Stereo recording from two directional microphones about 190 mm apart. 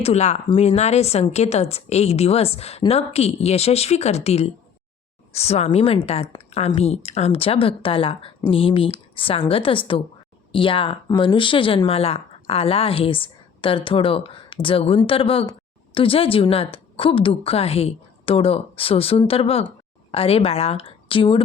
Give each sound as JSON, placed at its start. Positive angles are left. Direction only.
{"t": 0.0, "sound": "a woman's voice", "side_deg": 35}